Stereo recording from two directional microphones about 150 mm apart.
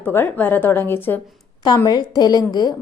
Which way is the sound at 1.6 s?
25° left (ahead or behind).